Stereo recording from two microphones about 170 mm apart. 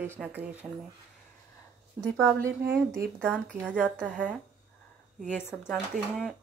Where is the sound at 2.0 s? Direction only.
5° left (ahead or behind).